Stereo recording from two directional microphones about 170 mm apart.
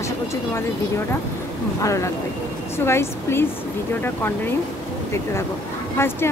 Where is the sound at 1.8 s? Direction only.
20° left (ahead or behind).